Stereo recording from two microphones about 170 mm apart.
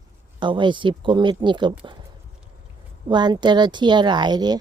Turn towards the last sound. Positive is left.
turn(degrees=-25)  # may be behind; listen again after turning